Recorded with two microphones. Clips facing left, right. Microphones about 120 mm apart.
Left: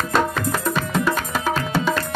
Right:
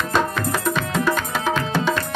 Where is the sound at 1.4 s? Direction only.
Centre (ahead or behind).